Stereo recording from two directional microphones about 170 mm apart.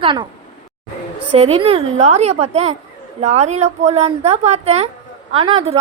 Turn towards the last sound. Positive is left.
turn(degrees=-35)  # may be behind; listen again after turning